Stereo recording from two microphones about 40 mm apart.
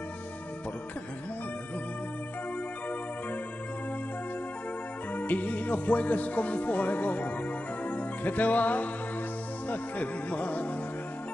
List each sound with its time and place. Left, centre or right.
5.1 s speech: left
7.8 s music: left
9.7 s speech: left